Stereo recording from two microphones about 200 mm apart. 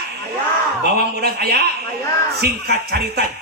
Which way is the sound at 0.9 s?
55° right (ahead or behind).